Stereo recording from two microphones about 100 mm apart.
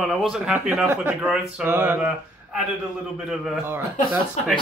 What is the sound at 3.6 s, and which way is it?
Speech, 20° right (ahead or behind).